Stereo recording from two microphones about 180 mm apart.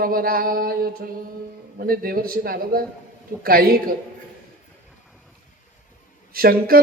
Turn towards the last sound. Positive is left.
turn(degrees=-55)  # may be behind; listen again after turning